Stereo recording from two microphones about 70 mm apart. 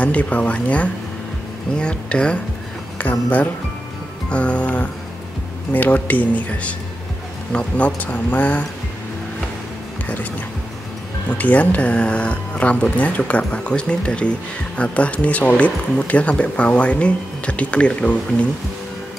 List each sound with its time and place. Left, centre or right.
0.0 s speech: centre
11.2 s speech: left